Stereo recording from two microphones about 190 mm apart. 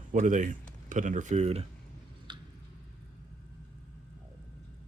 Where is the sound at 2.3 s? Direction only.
25° right (ahead or behind).